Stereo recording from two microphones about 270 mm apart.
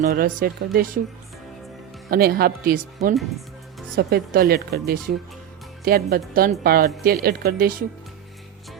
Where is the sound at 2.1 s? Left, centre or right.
Right.